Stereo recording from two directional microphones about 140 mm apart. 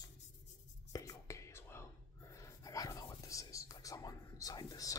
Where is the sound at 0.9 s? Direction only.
20° left (ahead or behind).